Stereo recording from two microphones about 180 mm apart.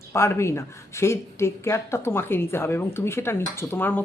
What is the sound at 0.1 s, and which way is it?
Speech, 15° left (ahead or behind).